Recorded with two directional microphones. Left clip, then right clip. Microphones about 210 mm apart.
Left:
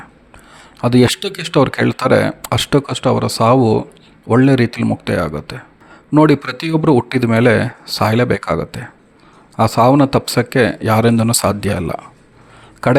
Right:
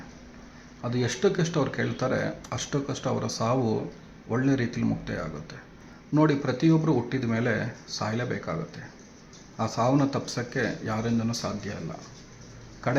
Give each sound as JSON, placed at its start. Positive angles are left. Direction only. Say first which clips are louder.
{"t": 0.8, "sound": "speech", "louder": "left 13 dB", "side_deg": 45}